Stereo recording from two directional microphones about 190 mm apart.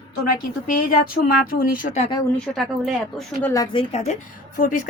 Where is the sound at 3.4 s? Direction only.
10° left (ahead or behind).